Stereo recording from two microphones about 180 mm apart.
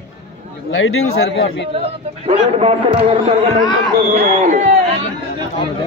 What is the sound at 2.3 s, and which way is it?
Speech, 35° right (ahead or behind).